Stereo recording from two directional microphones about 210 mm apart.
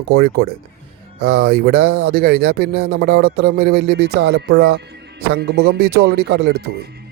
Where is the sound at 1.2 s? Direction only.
50° right (ahead or behind).